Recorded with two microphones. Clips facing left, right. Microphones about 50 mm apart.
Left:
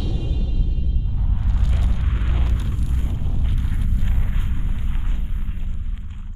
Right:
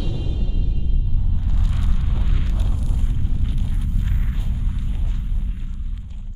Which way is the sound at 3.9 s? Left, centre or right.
Centre.